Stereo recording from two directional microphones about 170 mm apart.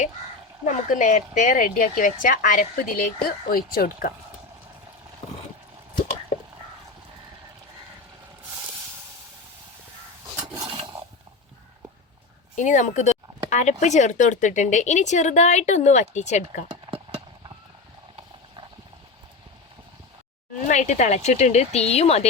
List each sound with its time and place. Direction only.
0.6 s speech: 50° left (ahead or behind)
10.4 s a sound: 25° right (ahead or behind)
12.5 s speech: 45° left (ahead or behind)
20.7 s speech: 45° left (ahead or behind)